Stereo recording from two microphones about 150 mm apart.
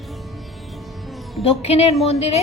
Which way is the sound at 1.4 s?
40° left (ahead or behind).